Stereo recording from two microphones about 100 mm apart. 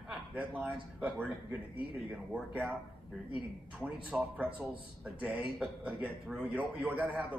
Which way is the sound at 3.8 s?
10° right (ahead or behind).